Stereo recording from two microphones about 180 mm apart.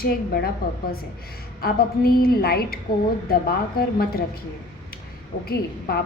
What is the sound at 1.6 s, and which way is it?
A woman's voice, 55° left (ahead or behind).